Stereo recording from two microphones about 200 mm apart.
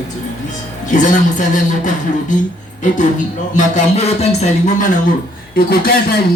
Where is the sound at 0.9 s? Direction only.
40° left (ahead or behind).